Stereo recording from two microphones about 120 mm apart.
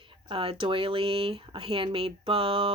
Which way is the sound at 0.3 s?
50° right (ahead or behind).